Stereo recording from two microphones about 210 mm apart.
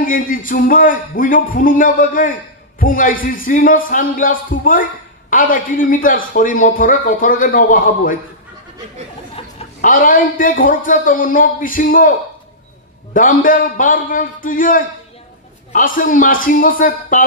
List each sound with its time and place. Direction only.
0.0 s a man's voice: 40° left (ahead or behind)
9.3 s a man's voice: 35° left (ahead or behind)